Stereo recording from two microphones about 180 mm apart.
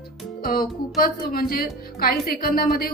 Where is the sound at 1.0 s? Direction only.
55° left (ahead or behind).